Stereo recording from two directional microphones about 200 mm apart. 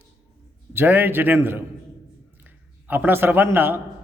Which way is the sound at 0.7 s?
10° right (ahead or behind).